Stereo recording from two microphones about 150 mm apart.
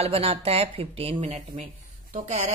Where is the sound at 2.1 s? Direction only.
55° right (ahead or behind).